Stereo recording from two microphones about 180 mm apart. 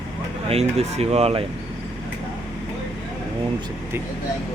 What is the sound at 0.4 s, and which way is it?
Speech, 35° right (ahead or behind).